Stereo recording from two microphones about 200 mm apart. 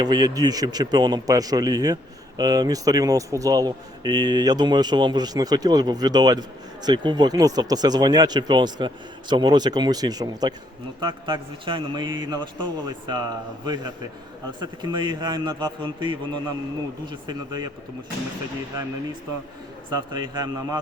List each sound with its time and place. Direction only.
0.0 s a man's voice: 20° right (ahead or behind)
19.9 s a man's voice: 20° right (ahead or behind)